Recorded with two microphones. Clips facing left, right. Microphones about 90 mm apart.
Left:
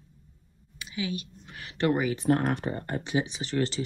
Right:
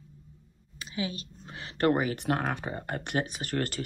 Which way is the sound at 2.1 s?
70° right (ahead or behind).